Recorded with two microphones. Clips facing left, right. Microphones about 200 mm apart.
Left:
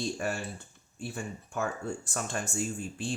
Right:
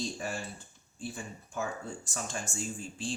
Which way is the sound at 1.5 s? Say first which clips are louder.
Left 3 dB; 60° left (ahead or behind).